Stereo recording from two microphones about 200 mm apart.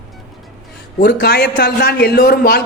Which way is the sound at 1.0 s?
55° left (ahead or behind).